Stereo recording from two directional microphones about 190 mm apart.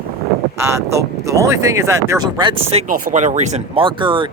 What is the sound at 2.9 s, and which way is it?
Speech, 40° right (ahead or behind).